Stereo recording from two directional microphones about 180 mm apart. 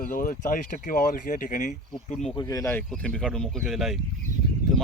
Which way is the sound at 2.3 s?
20° left (ahead or behind).